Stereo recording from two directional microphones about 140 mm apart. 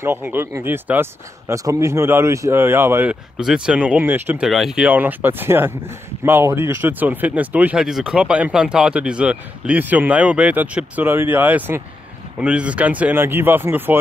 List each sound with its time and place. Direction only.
0.0 s speech: 15° right (ahead or behind)
4.5 s speech: centre (ahead or behind)